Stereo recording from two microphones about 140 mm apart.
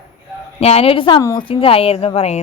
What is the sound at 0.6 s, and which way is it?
Speech, 45° left (ahead or behind).